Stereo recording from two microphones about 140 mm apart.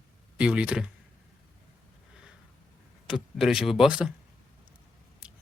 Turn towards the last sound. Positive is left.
turn(degrees=-5)  # may be behind; listen again after turning